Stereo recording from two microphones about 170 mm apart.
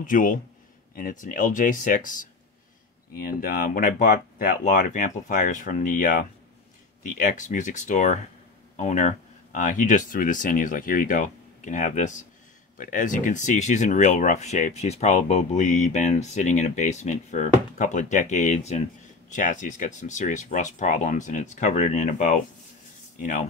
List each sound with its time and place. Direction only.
0.0 s speech: 50° left (ahead or behind)